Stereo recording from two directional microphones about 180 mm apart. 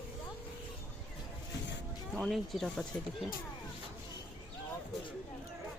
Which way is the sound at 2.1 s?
Centre (ahead or behind).